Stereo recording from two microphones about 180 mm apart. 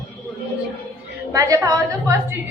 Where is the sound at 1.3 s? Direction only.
20° right (ahead or behind).